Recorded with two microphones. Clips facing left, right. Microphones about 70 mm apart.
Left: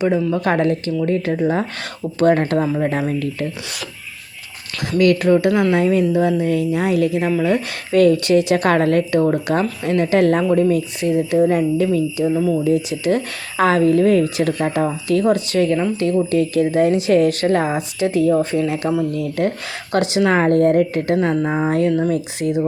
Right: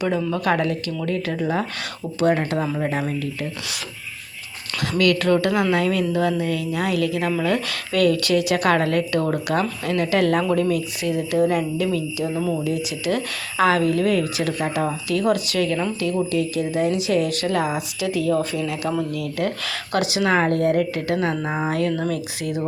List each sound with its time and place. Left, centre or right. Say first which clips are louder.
0.3 s a woman's voice: left 4 dB; left
2.1 s speech: left 5 dB; left
2.6 s a woman's voice: left 5 dB; centre
4.9 s a woman's voice: left 4 dB; left
9.1 s a woman's voice: left 5 dB; left
12.4 s speech: left 3 dB; centre
12.6 s a woman's voice: left 6 dB; left